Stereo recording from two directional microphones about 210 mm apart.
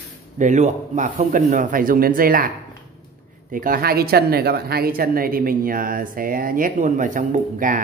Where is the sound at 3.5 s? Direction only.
40° right (ahead or behind).